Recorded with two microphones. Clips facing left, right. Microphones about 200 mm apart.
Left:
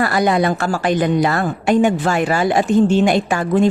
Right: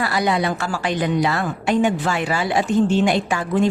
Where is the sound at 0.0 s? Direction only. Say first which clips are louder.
Left 4 dB; 50° left (ahead or behind).